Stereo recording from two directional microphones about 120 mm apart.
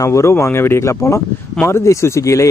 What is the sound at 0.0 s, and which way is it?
Speech, 25° left (ahead or behind).